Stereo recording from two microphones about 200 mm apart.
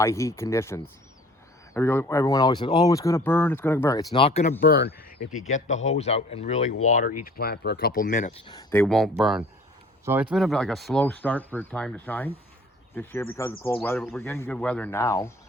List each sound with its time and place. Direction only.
0.0 s speech: 15° left (ahead or behind); by 4.5 s 30° left (ahead or behind)
4.6 s speech: 50° left (ahead or behind)
5.5 s speech: 35° left (ahead or behind)
6.9 s speech: 45° left (ahead or behind)
8.7 s speech: 5° left (ahead or behind)